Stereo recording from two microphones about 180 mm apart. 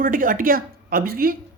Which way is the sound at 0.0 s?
50° right (ahead or behind).